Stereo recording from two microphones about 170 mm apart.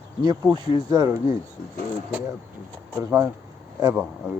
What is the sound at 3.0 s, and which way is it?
Speech, 15° right (ahead or behind).